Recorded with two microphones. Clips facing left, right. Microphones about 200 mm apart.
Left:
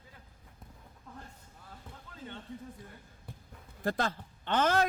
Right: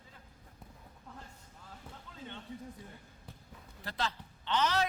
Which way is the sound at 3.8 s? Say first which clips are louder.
Left 6 dB; 50° left (ahead or behind).